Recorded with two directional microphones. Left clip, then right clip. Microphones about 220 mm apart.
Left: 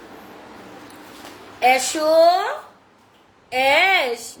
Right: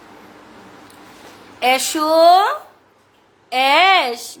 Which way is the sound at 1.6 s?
30° right (ahead or behind).